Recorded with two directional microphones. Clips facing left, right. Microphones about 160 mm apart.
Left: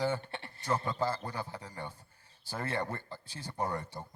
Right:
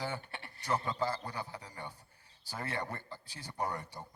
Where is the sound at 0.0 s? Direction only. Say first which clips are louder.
Left 7 dB; 25° left (ahead or behind).